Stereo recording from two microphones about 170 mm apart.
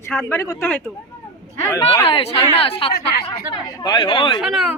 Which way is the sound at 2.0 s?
35° left (ahead or behind).